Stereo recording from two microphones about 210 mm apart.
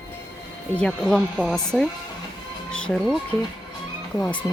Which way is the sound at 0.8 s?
Centre (ahead or behind).